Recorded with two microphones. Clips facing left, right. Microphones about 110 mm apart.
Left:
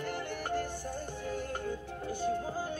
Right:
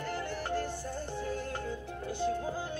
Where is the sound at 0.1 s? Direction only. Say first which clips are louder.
Right 2 dB; 55° left (ahead or behind).